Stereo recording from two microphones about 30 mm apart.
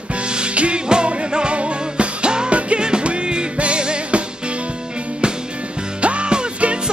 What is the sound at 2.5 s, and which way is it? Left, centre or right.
Music, right.